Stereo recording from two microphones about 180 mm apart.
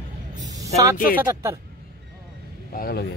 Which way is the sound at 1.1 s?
15° right (ahead or behind).